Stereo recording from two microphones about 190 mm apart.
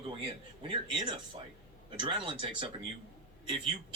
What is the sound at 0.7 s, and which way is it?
Speech, 25° right (ahead or behind).